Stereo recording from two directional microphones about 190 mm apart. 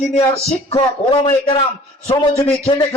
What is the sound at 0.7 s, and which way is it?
A man's voice, 25° left (ahead or behind).